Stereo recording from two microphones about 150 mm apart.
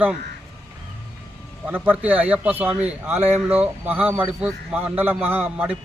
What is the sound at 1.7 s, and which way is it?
A man's voice, 10° right (ahead or behind).